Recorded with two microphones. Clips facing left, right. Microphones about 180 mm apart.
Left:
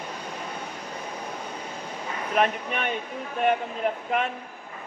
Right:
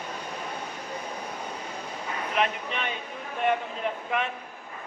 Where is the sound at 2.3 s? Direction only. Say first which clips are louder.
Left 4 dB; 50° left (ahead or behind).